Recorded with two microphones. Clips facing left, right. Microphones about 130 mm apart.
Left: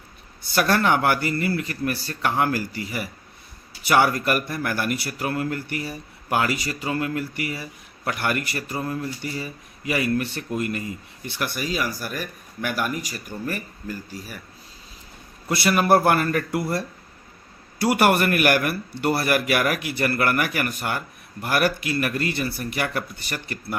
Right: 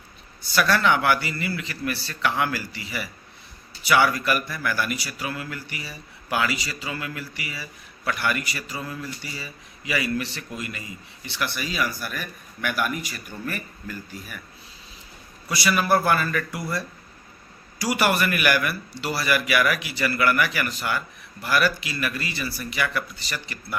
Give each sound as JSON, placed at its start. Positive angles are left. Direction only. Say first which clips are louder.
{"t": 0.4, "sound": "speech", "louder": "left 1 dB", "side_deg": 50}
{"t": 15.4, "sound": "a man's voice", "louder": "left 3 dB", "side_deg": 55}